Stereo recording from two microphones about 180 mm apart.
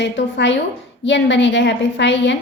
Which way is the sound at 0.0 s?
80° left.